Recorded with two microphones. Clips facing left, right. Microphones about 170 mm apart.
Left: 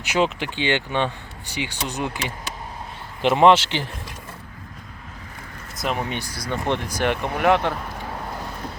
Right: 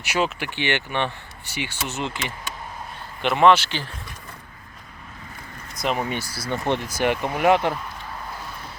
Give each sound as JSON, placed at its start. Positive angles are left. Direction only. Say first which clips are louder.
{"t": 0.0, "sound": "speech", "louder": "left 3 dB", "side_deg": 15}
{"t": 3.2, "sound": "speech", "louder": "left 2 dB", "side_deg": 25}
{"t": 5.8, "sound": "speech", "louder": "right 1 dB", "side_deg": 0}